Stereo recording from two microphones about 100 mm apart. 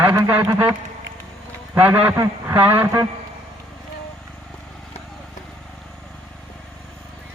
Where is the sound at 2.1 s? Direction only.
30° right (ahead or behind).